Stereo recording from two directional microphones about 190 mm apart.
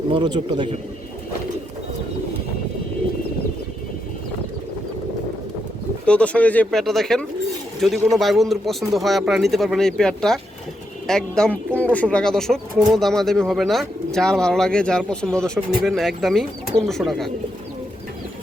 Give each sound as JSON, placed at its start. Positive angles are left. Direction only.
{"t": 0.1, "sound": "speech", "side_deg": -25}
{"t": 6.1, "sound": "speech", "side_deg": 5}